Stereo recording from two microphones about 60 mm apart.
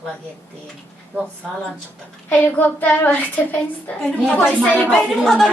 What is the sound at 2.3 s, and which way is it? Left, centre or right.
Child singing, left.